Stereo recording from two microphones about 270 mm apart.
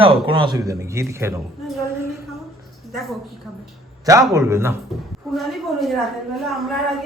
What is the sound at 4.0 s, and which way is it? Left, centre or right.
A man's voice, centre.